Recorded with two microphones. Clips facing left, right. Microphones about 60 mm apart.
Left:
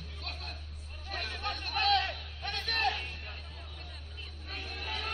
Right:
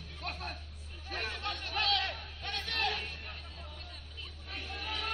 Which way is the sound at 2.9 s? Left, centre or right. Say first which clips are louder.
Left 3 dB; centre.